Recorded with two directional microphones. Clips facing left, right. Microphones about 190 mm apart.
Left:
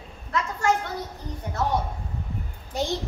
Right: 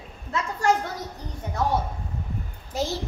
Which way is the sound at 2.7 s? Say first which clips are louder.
Even; centre (ahead or behind).